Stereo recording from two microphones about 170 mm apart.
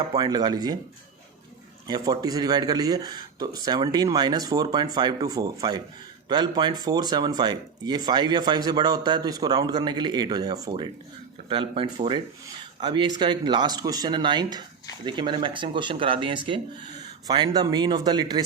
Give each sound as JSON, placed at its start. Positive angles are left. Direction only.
{"t": 0.1, "sound": "speech", "side_deg": -25}
{"t": 1.9, "sound": "speech", "side_deg": -20}